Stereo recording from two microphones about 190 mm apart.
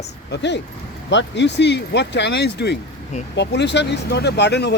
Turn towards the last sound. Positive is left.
turn(degrees=60)  # may be behind; listen again after turning